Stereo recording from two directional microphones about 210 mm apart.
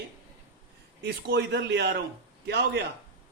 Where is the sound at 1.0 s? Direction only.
55° right (ahead or behind).